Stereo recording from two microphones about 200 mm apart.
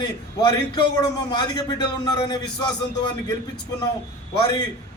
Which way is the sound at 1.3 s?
20° left (ahead or behind).